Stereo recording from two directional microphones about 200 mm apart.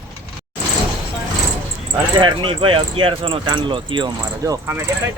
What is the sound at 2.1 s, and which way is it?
Speech, 20° right (ahead or behind).